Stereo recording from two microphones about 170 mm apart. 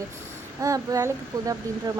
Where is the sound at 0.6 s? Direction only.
20° right (ahead or behind).